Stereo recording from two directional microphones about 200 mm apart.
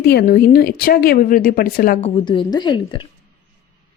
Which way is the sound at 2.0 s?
25° left (ahead or behind).